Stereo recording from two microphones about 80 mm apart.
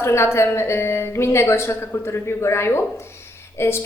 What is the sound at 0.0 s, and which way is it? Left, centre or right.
A woman's voice, left.